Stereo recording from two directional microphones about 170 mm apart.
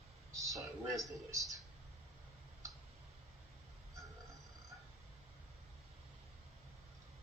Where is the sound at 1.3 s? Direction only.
20° right (ahead or behind).